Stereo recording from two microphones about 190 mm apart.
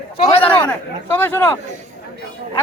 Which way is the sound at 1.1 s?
10° left (ahead or behind).